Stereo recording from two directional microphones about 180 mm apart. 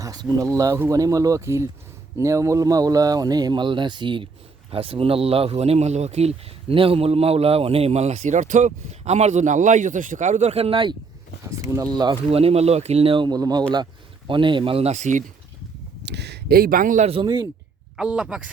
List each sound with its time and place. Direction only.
0.0 s speech: 20° right (ahead or behind); by 15.2 s 40° right (ahead or behind)
16.0 s speech: 70° right (ahead or behind); by 17.1 s 45° right (ahead or behind)
17.1 s speech: 30° right (ahead or behind)
17.9 s speech: 5° right (ahead or behind)